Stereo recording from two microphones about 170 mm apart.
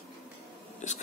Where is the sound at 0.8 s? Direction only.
45° left (ahead or behind).